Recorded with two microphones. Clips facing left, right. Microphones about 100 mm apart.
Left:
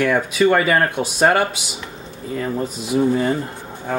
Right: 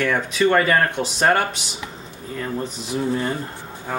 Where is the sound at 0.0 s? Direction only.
10° left (ahead or behind).